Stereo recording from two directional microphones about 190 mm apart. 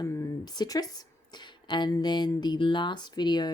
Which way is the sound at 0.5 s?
20° left (ahead or behind).